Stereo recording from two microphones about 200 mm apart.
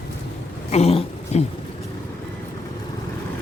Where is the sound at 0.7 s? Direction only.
30° left (ahead or behind).